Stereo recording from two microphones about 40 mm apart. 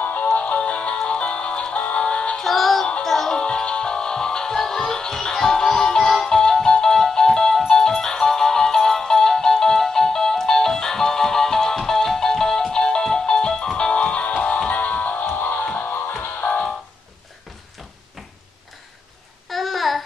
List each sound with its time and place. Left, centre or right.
0.0 s music: left
0.6 s music: left
2.3 s music: centre
3.3 s music: left
15.2 s music: left
16.4 s music: left
19.5 s babbling: centre